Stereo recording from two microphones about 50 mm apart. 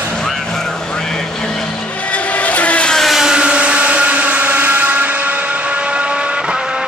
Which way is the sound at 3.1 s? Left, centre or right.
Centre.